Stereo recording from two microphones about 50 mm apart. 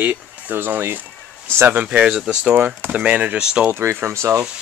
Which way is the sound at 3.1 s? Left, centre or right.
Right.